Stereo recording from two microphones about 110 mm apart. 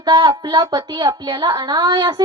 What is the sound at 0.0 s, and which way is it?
A woman's voice, 45° right (ahead or behind).